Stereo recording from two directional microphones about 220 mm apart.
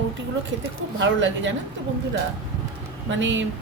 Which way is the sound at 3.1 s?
55° right (ahead or behind).